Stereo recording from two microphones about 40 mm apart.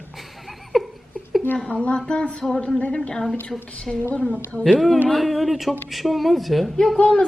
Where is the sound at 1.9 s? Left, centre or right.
Left.